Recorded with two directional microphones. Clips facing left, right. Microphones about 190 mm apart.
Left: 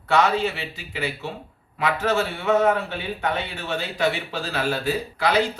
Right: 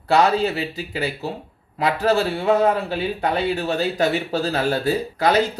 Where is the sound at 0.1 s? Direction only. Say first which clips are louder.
Right 3 dB; 35° right (ahead or behind).